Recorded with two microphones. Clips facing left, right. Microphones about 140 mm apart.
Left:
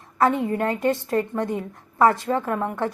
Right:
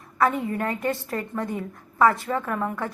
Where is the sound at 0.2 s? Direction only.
25° left (ahead or behind).